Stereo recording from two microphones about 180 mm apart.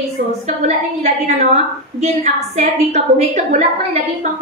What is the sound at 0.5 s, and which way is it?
A woman's voice, 40° right (ahead or behind).